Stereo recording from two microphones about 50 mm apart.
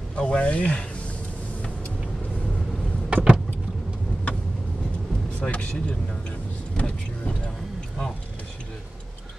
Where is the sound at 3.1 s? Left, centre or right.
Right.